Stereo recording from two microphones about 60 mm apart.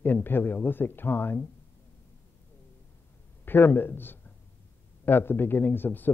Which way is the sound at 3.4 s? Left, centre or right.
Left.